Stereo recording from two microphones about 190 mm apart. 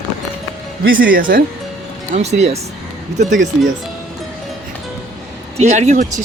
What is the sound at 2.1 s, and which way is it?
Speech, 35° right (ahead or behind).